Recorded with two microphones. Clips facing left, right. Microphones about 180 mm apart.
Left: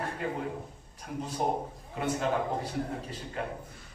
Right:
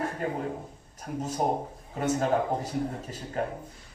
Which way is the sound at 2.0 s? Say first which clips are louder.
Right 4 dB; 40° right (ahead or behind).